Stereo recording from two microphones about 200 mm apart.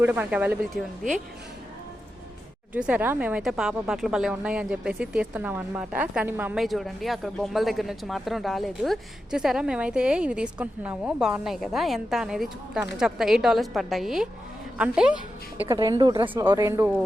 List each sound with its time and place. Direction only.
0.0 s speech: 10° right (ahead or behind)
2.7 s a woman's voice: 5° right (ahead or behind); by 16.3 s 20° right (ahead or behind)
16.3 s speech: 10° right (ahead or behind)